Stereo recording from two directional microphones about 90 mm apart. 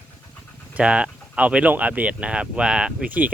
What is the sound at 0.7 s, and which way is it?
Speech, 10° right (ahead or behind).